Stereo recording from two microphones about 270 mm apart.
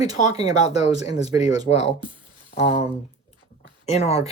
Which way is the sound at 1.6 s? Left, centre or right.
Left.